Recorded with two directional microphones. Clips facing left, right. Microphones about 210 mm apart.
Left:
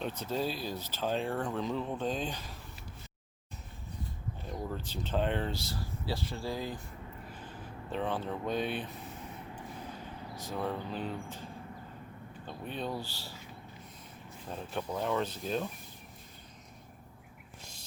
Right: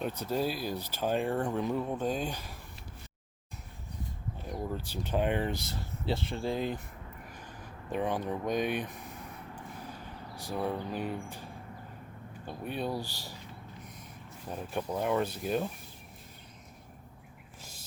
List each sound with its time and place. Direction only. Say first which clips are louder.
0.0 s speech: right 2 dB; 10° right (ahead or behind)
4.7 s speech: right 1 dB; 10° right (ahead or behind)
10.3 s speech: right 2 dB; 10° right (ahead or behind)
12.5 s speech: right 3 dB; 10° right (ahead or behind)
14.5 s speech: right 2 dB; 10° right (ahead or behind)
17.6 s a sound: right 2 dB; 5° right (ahead or behind)